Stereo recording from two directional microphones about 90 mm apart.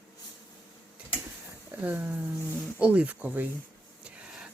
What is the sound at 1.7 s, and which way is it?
Speech, 20° right (ahead or behind).